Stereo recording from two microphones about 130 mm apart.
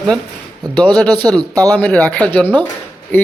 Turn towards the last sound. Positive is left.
turn(degrees=15)  # may be behind; listen again after turning